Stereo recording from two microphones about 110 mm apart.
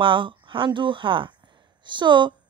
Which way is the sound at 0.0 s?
50° right (ahead or behind).